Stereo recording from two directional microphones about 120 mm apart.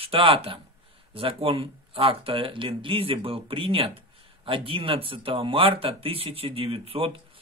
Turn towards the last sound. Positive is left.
turn(degrees=-50)  # may be behind; listen again after turning